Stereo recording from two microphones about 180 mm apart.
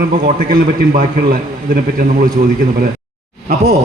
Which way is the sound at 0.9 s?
55° right (ahead or behind).